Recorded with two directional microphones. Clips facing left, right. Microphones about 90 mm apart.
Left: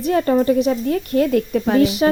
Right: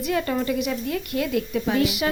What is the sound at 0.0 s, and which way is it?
A woman's voice, 35° left (ahead or behind).